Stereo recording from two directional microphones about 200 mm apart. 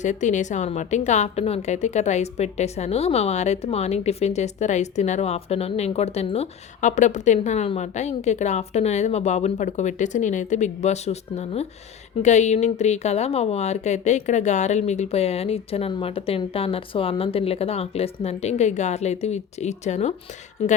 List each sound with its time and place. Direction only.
0.0 s a woman's voice: 35° left (ahead or behind)